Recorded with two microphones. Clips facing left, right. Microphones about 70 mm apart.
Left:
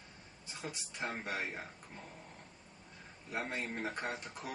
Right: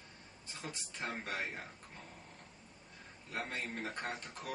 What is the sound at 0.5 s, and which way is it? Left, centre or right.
Speech, centre.